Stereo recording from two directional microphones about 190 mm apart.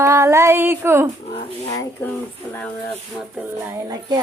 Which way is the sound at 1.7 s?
20° left (ahead or behind).